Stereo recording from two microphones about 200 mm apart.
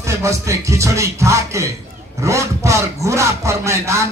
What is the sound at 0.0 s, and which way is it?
Speech, 15° right (ahead or behind).